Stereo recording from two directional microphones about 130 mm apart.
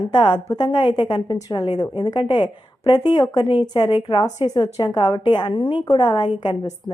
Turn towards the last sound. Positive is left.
turn(degrees=40)  # may be behind; listen again after turning